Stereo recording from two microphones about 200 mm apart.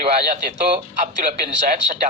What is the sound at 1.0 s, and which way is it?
Speech, 40° right (ahead or behind).